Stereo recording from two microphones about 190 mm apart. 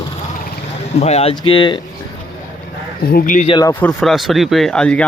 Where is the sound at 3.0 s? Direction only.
50° left (ahead or behind).